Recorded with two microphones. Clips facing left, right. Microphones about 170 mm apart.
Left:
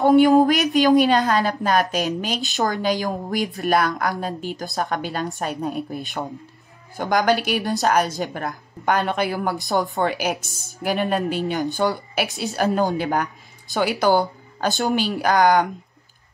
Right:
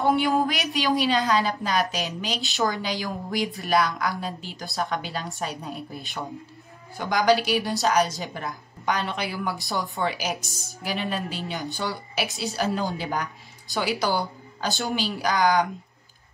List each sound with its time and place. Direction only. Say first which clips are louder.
0.0 s a woman's voice: left 8 dB; 45° left (ahead or behind)
7.0 s a woman's voice: left 2 dB; 50° left (ahead or behind)
12.3 s a woman's voice: left 3 dB; centre (ahead or behind)
12.5 s a woman's voice: left 7 dB; 55° left (ahead or behind)